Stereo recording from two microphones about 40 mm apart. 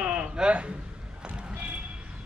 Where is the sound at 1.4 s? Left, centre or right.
Right.